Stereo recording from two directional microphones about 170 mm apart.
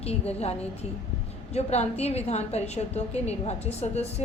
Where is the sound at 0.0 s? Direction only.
35° left (ahead or behind).